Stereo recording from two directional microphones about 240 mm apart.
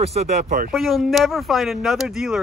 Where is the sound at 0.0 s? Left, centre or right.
Right.